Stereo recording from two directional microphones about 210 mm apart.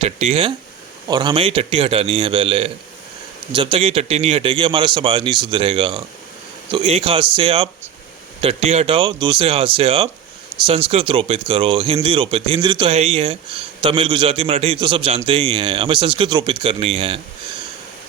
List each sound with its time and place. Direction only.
0.0 s speech: 30° right (ahead or behind)